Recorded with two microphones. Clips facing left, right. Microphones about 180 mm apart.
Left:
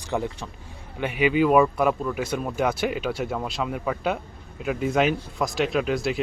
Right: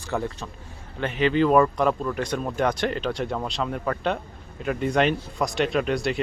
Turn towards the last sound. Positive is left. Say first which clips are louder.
# even
turn(degrees=0)  # may be behind; listen again after turning